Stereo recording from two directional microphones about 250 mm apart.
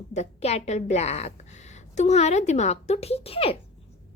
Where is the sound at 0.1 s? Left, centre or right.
Left.